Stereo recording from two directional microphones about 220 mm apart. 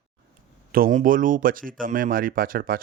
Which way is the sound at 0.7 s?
40° right (ahead or behind).